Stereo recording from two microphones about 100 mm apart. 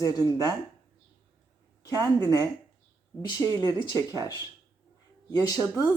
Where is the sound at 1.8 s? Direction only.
35° left (ahead or behind).